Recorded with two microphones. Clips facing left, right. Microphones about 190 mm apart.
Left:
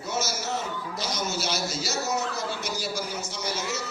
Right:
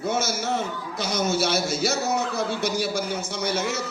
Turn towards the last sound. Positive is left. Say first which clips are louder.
# right 5 dB
turn(degrees=-60)  # may be behind; listen again after turning